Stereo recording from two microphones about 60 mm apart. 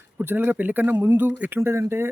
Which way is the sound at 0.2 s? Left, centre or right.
Right.